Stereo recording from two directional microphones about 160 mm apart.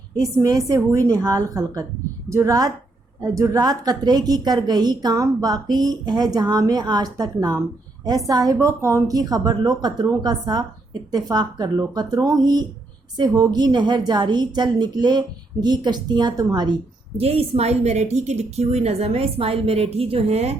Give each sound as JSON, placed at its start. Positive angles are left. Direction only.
{"t": 0.2, "sound": "a woman's voice", "side_deg": -20}
{"t": 17.2, "sound": "a woman's voice", "side_deg": -40}